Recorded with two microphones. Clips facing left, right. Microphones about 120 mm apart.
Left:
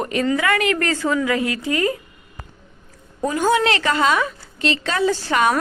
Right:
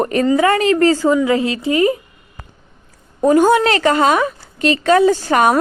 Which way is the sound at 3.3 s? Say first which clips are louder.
Right 7 dB; 40° right (ahead or behind).